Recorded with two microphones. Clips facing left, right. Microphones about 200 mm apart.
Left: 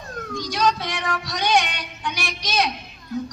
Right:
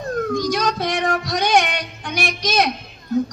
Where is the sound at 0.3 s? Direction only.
45° right (ahead or behind).